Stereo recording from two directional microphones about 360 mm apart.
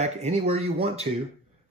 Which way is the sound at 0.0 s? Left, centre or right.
Centre.